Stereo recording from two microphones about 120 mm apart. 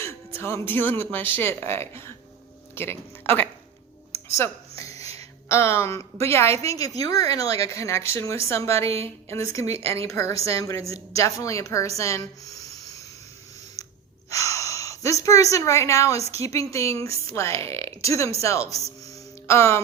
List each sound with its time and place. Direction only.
0.0 s speech: 20° left (ahead or behind)
4.3 s a sound: 25° left (ahead or behind)
5.5 s a woman's voice: 20° left (ahead or behind)
8.9 s speech: 55° right (ahead or behind)
9.3 s a woman's voice: 25° left (ahead or behind)
11.9 s a sound: 25° left (ahead or behind)
13.8 s gasp: 30° left (ahead or behind)
14.3 s a woman's voice: 25° left (ahead or behind)
17.8 s speech: 55° right (ahead or behind)
18.3 s a woman's voice: 25° left (ahead or behind)
19.1 s a sound: 25° left (ahead or behind)